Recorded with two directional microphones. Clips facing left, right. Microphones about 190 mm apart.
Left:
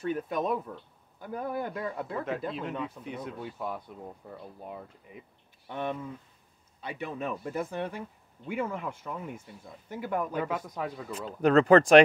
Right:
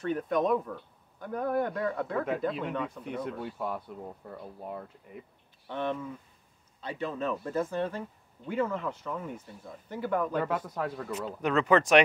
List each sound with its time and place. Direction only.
0.0 s speech: 5° left (ahead or behind)
11.4 s speech: 35° left (ahead or behind)